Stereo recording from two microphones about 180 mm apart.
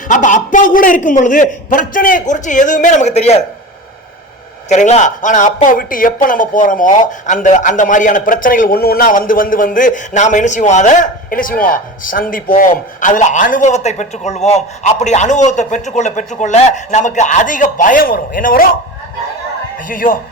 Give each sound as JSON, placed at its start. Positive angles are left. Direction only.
{"t": 0.1, "sound": "speech", "side_deg": 45}
{"t": 4.7, "sound": "a man's voice", "side_deg": 40}
{"t": 19.9, "sound": "speech", "side_deg": 50}